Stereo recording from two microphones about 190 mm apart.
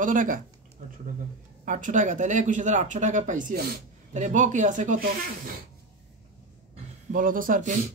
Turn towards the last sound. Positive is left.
turn(degrees=-45)  # may be behind; listen again after turning